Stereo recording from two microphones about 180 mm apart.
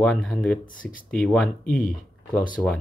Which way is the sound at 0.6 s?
50° left (ahead or behind).